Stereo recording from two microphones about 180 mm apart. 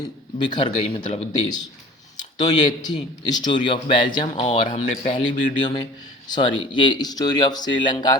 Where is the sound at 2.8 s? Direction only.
25° left (ahead or behind).